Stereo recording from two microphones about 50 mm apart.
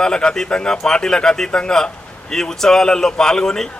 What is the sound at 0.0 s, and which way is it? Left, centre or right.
A man's voice, centre.